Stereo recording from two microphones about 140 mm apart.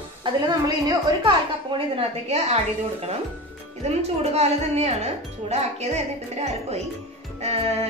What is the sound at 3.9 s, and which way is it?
A woman's voice, 50° right (ahead or behind).